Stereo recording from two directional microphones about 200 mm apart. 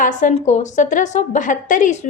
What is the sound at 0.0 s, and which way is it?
A woman's voice, 40° left (ahead or behind).